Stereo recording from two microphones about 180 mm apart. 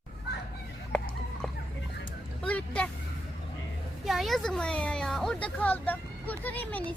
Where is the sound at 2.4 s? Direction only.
10° left (ahead or behind).